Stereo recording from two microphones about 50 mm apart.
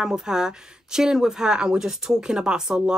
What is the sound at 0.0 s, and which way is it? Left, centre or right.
Speech, centre.